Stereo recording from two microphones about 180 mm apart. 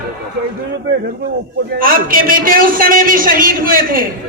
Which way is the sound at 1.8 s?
50° right (ahead or behind).